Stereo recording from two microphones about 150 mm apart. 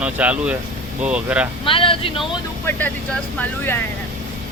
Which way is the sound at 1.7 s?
35° left (ahead or behind).